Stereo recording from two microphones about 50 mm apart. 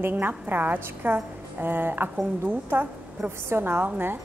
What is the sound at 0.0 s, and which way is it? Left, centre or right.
A woman's voice, right.